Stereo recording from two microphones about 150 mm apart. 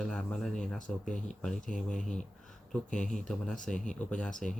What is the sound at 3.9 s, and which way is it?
Speech, 5° left (ahead or behind).